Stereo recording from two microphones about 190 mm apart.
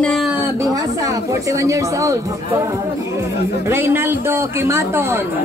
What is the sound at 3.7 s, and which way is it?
Speech, 10° right (ahead or behind).